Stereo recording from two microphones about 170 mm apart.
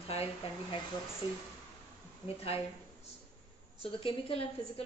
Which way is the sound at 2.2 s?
35° left (ahead or behind).